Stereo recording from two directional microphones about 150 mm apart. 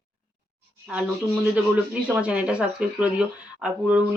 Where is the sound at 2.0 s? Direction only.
10° right (ahead or behind).